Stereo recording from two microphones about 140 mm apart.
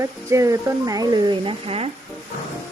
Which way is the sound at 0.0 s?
20° right (ahead or behind).